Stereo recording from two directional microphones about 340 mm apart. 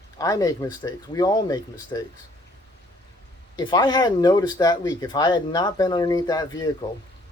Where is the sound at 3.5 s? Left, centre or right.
Centre.